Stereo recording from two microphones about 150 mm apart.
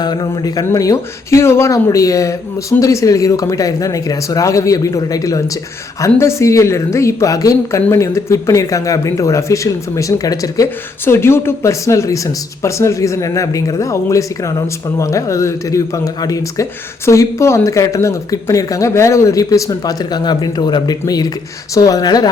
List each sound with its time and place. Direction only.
0.0 s a woman's voice: 30° left (ahead or behind)